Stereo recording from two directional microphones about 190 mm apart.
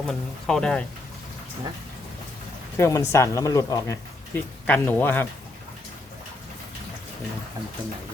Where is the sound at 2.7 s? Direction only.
15° left (ahead or behind).